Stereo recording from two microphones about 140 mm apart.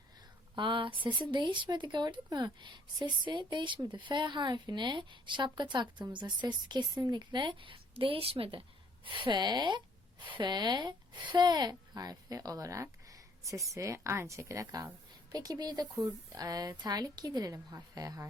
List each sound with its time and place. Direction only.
0.5 s speech: 35° right (ahead or behind)